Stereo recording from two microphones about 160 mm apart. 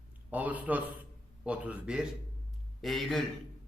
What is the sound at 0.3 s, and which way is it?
A man's voice, 10° right (ahead or behind).